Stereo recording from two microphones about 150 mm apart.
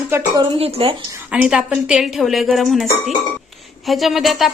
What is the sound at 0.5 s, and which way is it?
Speech, 40° right (ahead or behind).